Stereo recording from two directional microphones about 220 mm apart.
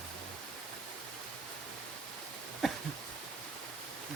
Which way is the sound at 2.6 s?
Centre (ahead or behind).